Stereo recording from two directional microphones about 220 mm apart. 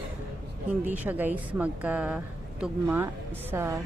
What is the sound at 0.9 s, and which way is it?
A woman's voice, 5° right (ahead or behind).